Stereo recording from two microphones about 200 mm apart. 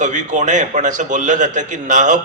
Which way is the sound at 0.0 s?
40° right (ahead or behind).